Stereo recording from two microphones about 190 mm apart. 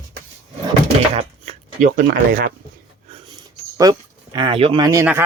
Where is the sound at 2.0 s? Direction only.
45° right (ahead or behind).